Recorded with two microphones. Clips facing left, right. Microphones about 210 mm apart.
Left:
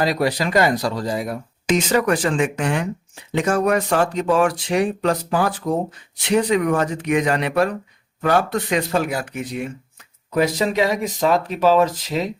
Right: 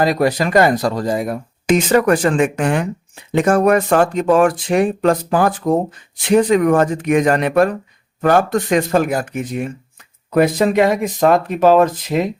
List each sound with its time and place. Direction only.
0.0 s speech: 50° right (ahead or behind)